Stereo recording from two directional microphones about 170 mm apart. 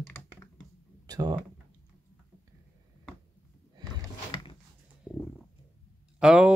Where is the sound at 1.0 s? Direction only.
25° right (ahead or behind).